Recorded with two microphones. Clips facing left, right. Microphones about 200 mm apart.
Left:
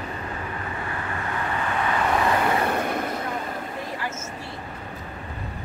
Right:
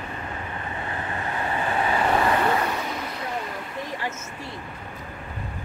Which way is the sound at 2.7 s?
55° left (ahead or behind).